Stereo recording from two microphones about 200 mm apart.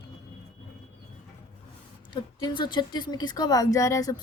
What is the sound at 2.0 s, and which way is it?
A woman's voice, 25° left (ahead or behind).